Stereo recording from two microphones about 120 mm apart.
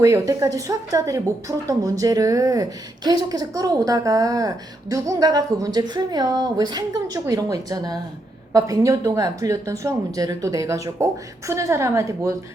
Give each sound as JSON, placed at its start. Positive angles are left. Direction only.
{"t": 0.0, "sound": "a woman's voice", "side_deg": -25}